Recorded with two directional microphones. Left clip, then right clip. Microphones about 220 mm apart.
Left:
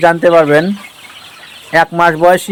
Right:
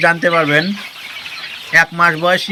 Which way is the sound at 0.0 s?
15° left (ahead or behind).